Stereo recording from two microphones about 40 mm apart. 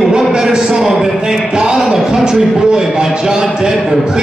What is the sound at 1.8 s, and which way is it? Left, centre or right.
Speech, centre.